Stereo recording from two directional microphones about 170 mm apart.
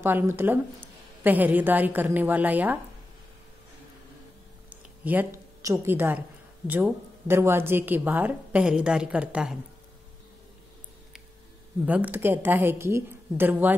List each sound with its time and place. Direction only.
0.0 s a woman's voice: 15° right (ahead or behind)
4.6 s a sound: 10° right (ahead or behind)
6.7 s a woman's voice: 15° right (ahead or behind)
11.8 s a woman's voice: 10° right (ahead or behind)